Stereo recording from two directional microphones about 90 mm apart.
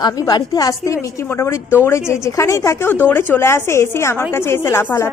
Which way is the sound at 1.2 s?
30° left (ahead or behind).